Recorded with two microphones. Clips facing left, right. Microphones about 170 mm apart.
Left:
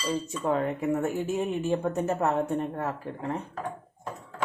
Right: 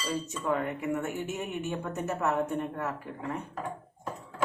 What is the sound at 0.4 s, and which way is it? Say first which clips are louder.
Speech: left 4 dB; 30° left (ahead or behind).